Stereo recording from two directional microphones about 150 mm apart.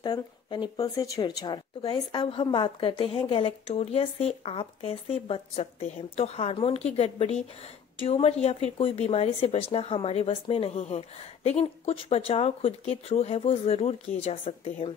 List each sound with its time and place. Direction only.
0.0 s speech: 30° left (ahead or behind)